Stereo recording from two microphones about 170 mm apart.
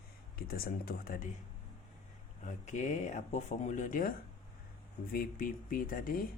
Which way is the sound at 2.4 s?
45° left (ahead or behind).